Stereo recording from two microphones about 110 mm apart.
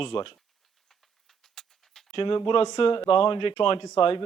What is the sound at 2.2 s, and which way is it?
A man's voice, 45° left (ahead or behind).